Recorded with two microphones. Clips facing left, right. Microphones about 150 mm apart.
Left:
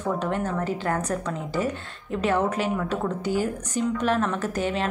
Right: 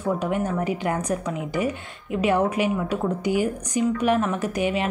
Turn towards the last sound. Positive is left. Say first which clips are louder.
# right 2 dB
turn(degrees=-15)  # may be behind; listen again after turning